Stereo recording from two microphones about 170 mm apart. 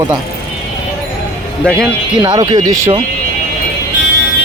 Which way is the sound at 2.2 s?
25° right (ahead or behind).